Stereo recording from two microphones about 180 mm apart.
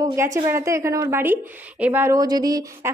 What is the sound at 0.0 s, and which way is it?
A woman's voice, 15° right (ahead or behind).